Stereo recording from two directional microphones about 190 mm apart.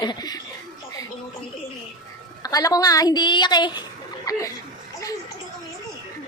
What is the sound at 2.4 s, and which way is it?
A woman's voice, 20° left (ahead or behind).